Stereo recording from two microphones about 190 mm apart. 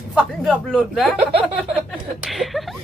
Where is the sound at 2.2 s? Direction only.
Centre (ahead or behind).